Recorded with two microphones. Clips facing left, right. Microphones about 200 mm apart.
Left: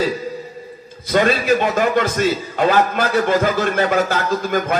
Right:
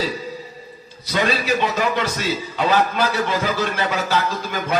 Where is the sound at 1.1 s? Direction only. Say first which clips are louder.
Left 5 dB; 50° left (ahead or behind).